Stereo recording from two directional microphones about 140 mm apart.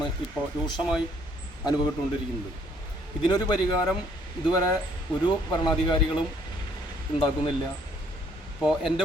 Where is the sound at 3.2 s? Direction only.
25° left (ahead or behind).